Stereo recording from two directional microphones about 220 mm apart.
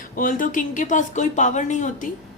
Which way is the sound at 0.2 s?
40° left (ahead or behind).